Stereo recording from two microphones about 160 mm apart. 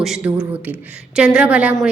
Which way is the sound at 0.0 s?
5° right (ahead or behind).